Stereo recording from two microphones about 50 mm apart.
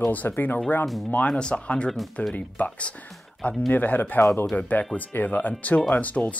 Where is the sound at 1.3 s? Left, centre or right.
Centre.